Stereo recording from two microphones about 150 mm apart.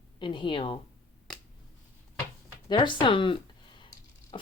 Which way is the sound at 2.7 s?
30° left (ahead or behind).